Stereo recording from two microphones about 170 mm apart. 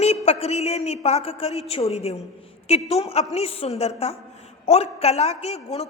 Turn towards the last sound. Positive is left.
turn(degrees=40)  # may be behind; listen again after turning